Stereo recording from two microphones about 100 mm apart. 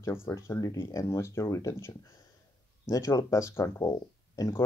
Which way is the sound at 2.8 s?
30° left (ahead or behind).